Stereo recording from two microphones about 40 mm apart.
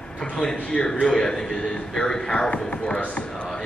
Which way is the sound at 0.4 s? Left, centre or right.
Centre.